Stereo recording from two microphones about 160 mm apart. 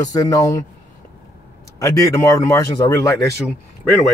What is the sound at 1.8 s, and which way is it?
Speech, 20° left (ahead or behind).